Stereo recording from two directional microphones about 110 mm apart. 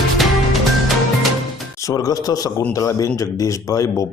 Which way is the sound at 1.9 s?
35° left (ahead or behind).